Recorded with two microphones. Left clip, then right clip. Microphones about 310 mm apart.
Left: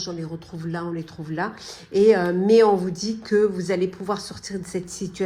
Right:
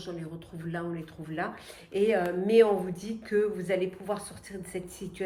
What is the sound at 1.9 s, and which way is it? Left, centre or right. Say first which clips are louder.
Speech: left 9 dB; centre.